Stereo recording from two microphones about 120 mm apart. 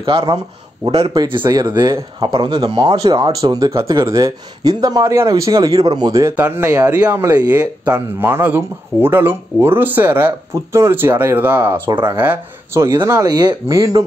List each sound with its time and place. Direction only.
0.0 s speech: 45° right (ahead or behind)
6.3 s speech: 15° right (ahead or behind)
13.0 s speech: 30° right (ahead or behind)